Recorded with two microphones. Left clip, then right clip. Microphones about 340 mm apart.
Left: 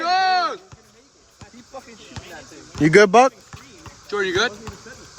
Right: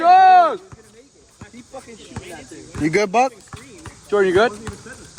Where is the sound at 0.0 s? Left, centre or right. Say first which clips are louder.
Right 8 dB; centre.